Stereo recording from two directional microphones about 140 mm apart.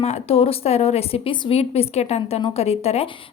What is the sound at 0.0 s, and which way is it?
A woman's voice, 50° left (ahead or behind).